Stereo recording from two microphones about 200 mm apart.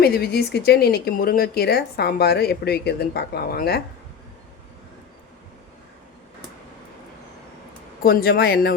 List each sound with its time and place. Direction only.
0.0 s speech: 50° left (ahead or behind)
8.0 s speech: 50° left (ahead or behind)